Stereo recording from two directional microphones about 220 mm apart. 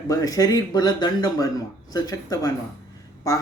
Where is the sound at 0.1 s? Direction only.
15° left (ahead or behind).